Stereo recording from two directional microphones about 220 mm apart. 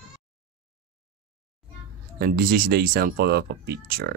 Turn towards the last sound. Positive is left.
turn(degrees=-45)  # may be behind; listen again after turning